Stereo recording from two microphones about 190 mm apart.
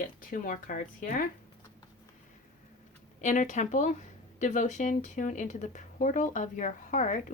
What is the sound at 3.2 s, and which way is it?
Speech, 40° left (ahead or behind).